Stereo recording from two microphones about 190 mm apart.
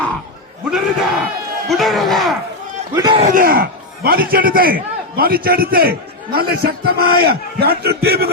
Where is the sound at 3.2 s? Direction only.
45° right (ahead or behind).